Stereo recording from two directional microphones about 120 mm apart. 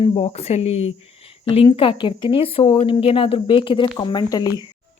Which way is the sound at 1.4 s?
50° left (ahead or behind).